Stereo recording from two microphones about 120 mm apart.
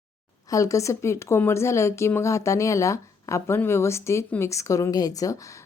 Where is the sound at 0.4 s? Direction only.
30° left (ahead or behind).